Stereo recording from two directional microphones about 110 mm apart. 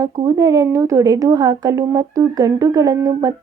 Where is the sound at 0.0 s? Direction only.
35° right (ahead or behind).